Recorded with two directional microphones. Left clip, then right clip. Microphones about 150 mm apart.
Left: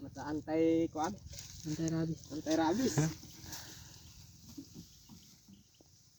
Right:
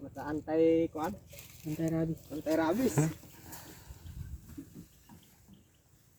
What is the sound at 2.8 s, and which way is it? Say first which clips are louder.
Speech: right 3 dB; 15° right (ahead or behind).